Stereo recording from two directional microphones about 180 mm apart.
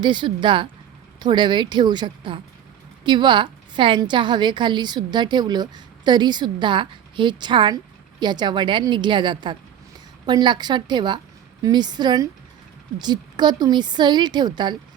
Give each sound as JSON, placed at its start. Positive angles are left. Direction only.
{"t": 0.0, "sound": "a woman's voice", "side_deg": -25}